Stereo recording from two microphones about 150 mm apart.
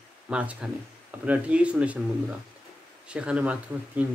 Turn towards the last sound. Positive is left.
turn(degrees=-10)  # may be behind; listen again after turning